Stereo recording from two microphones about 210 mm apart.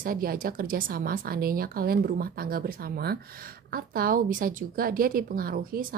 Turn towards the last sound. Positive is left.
turn(degrees=-45)  # may be behind; listen again after turning